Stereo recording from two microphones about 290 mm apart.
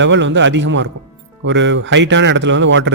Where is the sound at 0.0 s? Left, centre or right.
Right.